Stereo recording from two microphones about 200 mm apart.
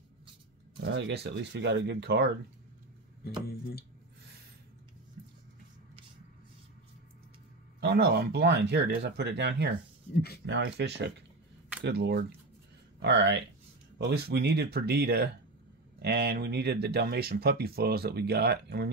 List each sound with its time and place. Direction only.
0.8 s speech: 60° right (ahead or behind)
7.8 s speech: 55° right (ahead or behind)